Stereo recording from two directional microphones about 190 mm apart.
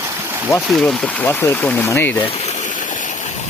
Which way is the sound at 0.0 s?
15° right (ahead or behind).